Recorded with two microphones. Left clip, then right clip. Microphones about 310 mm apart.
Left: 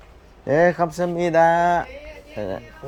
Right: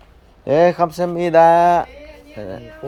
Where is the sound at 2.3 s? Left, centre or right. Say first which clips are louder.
Left 2 dB; centre.